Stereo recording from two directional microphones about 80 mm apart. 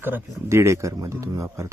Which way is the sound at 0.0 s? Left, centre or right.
Right.